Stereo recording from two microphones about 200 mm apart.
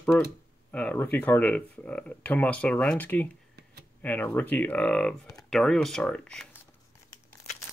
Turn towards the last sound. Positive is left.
turn(degrees=5)  # may be behind; listen again after turning